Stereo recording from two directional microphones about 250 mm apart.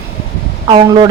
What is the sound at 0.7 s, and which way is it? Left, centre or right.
Speech, centre.